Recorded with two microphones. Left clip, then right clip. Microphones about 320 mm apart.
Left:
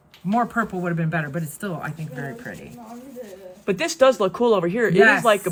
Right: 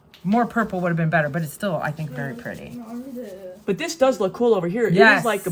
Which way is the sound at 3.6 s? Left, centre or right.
Left.